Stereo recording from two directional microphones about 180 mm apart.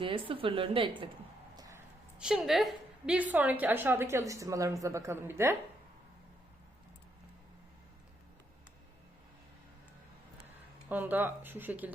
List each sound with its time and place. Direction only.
0.0 s a woman's voice: 30° right (ahead or behind)
1.5 s a sound: 20° right (ahead or behind)
2.1 s a woman's voice: 5° right (ahead or behind)
10.8 s a woman's voice: 10° right (ahead or behind)